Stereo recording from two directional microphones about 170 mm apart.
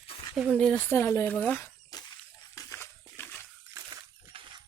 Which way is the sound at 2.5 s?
15° left (ahead or behind).